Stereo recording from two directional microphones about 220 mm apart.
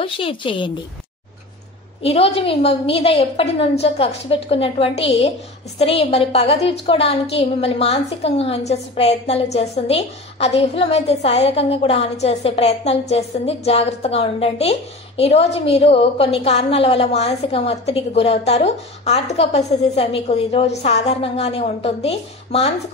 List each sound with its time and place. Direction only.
0.0 s a woman's voice: 25° left (ahead or behind)
2.0 s a woman's voice: 25° left (ahead or behind)